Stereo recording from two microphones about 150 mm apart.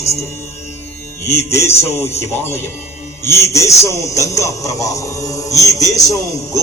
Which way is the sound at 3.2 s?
15° left (ahead or behind).